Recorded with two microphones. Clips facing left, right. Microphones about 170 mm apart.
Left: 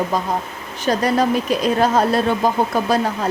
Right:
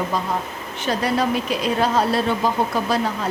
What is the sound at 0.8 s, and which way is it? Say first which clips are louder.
Speech: left 4 dB; 45° left (ahead or behind).